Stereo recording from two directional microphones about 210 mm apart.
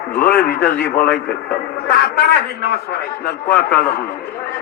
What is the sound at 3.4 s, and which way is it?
Speech, 10° left (ahead or behind).